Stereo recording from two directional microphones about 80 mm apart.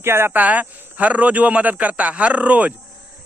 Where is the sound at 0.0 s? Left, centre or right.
Right.